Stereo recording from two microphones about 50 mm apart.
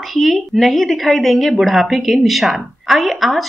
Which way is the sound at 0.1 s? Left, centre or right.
Centre.